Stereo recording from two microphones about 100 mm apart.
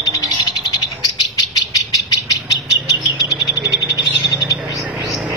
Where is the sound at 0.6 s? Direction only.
40° left (ahead or behind).